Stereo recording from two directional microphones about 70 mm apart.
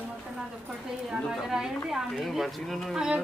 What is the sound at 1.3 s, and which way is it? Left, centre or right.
Speech, centre.